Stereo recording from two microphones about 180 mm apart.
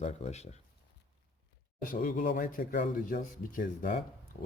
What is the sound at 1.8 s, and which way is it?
Speech, 50° left (ahead or behind).